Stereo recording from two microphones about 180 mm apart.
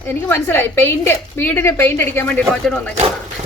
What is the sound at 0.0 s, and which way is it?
A woman's voice, 15° left (ahead or behind).